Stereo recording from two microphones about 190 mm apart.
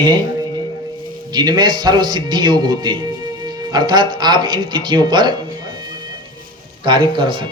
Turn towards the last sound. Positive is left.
turn(degrees=-25)  # may be behind; listen again after turning